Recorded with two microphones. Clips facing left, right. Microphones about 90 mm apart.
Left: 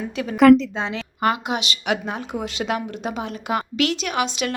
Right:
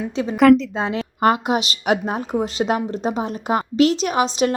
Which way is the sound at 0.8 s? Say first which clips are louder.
Right 4 dB; 45° right (ahead or behind).